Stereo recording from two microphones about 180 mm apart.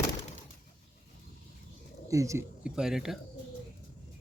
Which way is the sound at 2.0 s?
15° right (ahead or behind).